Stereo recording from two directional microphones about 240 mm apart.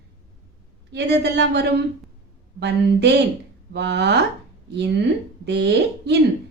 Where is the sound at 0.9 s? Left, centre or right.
Right.